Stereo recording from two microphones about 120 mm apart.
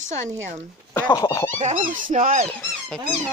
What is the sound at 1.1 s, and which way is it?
Speech, 30° left (ahead or behind).